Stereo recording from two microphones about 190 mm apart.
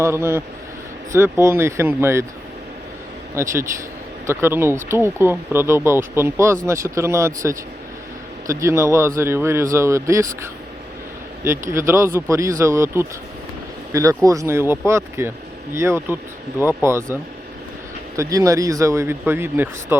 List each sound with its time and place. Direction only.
0.0 s speech: 15° right (ahead or behind)
3.3 s speech: 15° right (ahead or behind)
18.2 s speech: 15° right (ahead or behind)